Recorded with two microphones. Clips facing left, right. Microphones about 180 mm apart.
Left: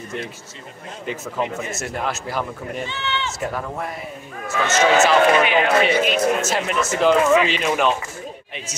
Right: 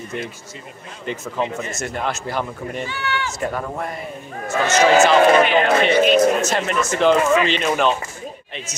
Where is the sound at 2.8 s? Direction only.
20° left (ahead or behind).